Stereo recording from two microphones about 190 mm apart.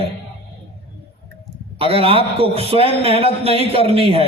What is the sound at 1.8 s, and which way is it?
A man's voice, 30° right (ahead or behind).